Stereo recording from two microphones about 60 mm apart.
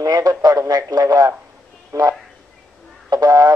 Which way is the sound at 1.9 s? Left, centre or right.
Right.